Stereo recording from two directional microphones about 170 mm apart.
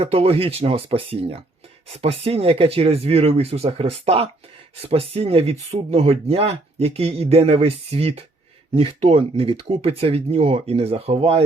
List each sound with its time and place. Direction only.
0.0 s speech: 35° right (ahead or behind)